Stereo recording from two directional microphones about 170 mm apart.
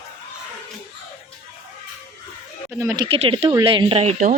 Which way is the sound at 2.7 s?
15° right (ahead or behind).